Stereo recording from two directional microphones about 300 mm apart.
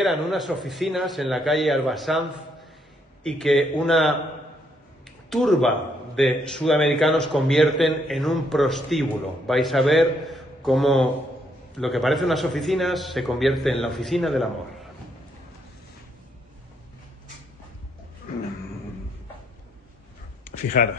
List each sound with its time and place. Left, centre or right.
0.0 s speech: centre
3.3 s speech: centre
5.3 s a man's voice: centre
20.8 s speech: left